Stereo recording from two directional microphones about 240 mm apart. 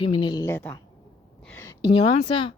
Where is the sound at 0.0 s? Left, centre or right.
Centre.